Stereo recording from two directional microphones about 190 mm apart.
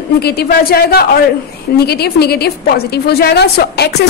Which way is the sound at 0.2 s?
55° left (ahead or behind).